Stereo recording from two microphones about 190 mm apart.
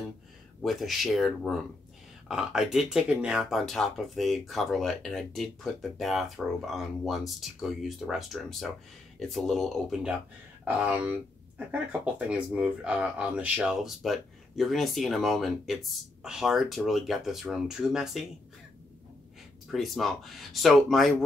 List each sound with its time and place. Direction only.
0.6 s speech: centre (ahead or behind)
19.7 s speech: centre (ahead or behind)